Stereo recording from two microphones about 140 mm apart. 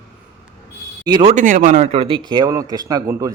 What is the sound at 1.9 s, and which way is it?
A man's voice, 40° right (ahead or behind).